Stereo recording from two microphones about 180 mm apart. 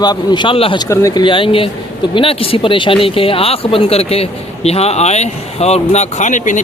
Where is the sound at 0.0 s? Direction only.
25° left (ahead or behind).